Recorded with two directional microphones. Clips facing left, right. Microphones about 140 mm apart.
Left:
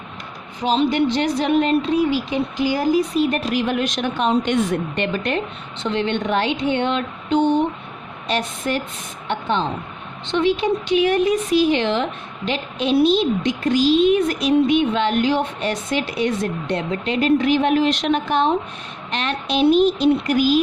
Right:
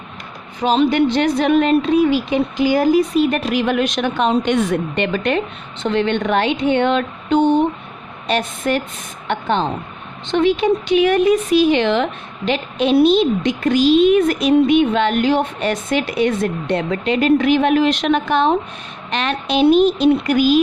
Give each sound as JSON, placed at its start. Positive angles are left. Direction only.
{"t": 0.6, "sound": "a woman's voice", "side_deg": -55}
{"t": 5.8, "sound": "speech", "side_deg": -55}
{"t": 8.3, "sound": "a woman's voice", "side_deg": -55}